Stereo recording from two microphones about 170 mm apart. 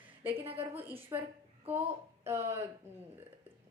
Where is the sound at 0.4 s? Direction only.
35° right (ahead or behind).